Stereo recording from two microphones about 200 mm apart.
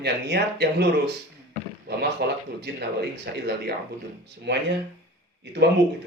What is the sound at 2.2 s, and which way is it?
Speech, 55° right (ahead or behind).